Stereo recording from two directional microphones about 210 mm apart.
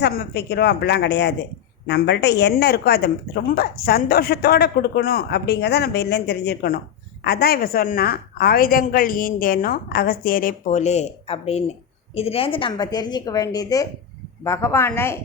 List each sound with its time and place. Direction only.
0.0 s a woman's voice: 50° left (ahead or behind); by 15.2 s 10° left (ahead or behind)